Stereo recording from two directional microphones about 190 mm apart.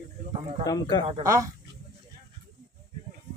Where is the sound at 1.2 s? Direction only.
15° right (ahead or behind).